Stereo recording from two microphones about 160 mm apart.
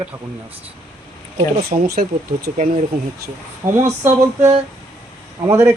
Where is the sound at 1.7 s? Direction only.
50° right (ahead or behind).